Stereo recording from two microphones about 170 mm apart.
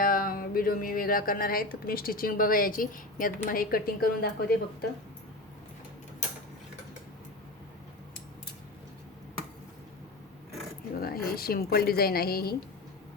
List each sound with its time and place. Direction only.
0.0 s speech: 55° left (ahead or behind)
10.9 s a woman's voice: 60° left (ahead or behind)